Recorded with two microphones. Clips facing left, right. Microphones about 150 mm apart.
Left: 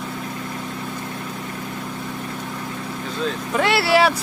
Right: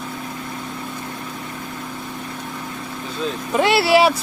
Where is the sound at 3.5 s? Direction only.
20° right (ahead or behind).